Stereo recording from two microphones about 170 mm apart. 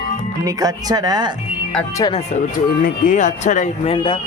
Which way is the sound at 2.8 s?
50° left (ahead or behind).